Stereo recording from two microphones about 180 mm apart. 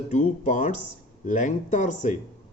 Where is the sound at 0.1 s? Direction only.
45° left (ahead or behind).